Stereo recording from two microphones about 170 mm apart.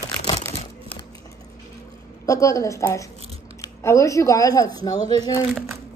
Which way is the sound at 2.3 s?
20° left (ahead or behind).